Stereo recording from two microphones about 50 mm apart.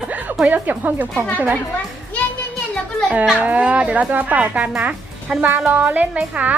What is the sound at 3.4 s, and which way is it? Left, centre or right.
Speech, right.